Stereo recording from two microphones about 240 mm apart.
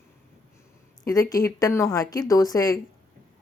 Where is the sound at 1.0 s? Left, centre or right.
Centre.